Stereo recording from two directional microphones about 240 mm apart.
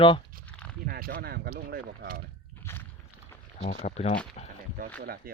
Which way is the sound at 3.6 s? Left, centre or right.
Left.